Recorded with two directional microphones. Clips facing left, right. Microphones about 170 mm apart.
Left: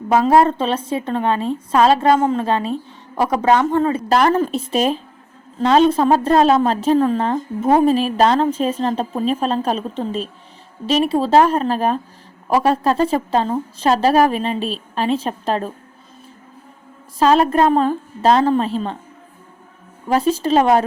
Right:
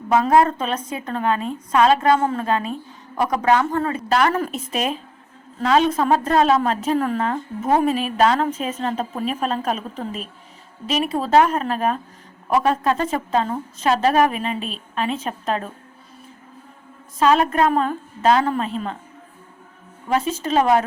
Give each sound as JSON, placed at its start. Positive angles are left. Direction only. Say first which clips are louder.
{"t": 0.1, "sound": "a woman's voice", "louder": "left 3 dB", "side_deg": 30}
{"t": 4.1, "sound": "a woman's voice", "louder": "left 3 dB", "side_deg": 35}
{"t": 17.2, "sound": "a woman's voice", "louder": "left 3 dB", "side_deg": 35}
{"t": 20.1, "sound": "a woman's voice", "louder": "left 5 dB", "side_deg": 35}